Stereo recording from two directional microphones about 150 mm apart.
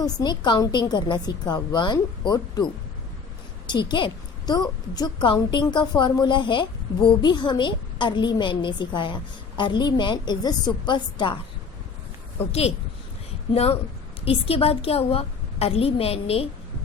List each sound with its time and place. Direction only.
0.0 s a woman's voice: 25° left (ahead or behind)
3.7 s a woman's voice: 30° left (ahead or behind)
12.5 s a woman's voice: 45° left (ahead or behind)